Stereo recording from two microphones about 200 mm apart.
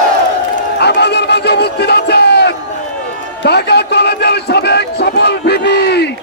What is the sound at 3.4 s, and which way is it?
Speech, 55° left (ahead or behind).